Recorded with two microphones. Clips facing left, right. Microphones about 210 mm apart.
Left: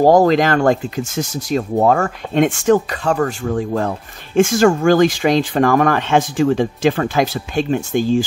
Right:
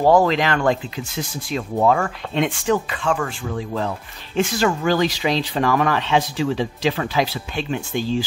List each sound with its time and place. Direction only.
0.0 s speech: 40° left (ahead or behind)